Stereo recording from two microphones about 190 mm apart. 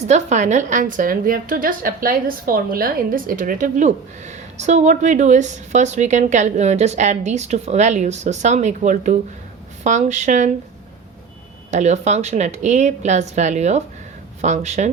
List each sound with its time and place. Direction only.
0.1 s a woman's voice: 40° right (ahead or behind)
11.7 s a woman's voice: 40° right (ahead or behind)